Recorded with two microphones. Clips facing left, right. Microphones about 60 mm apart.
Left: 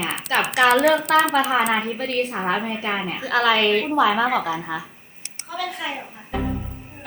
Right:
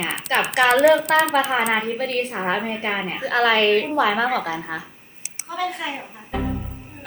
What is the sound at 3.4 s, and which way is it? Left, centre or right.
Speech, right.